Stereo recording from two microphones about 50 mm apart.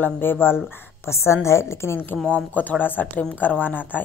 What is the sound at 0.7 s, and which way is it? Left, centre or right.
A woman's voice, left.